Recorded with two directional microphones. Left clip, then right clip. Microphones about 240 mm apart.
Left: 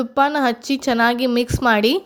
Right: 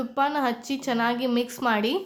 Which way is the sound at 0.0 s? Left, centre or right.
Left.